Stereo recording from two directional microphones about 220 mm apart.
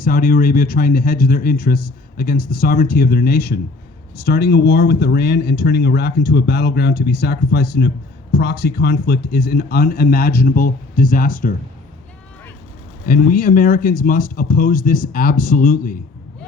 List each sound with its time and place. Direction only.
0.0 s speech: 40° left (ahead or behind)
13.1 s speech: 40° left (ahead or behind)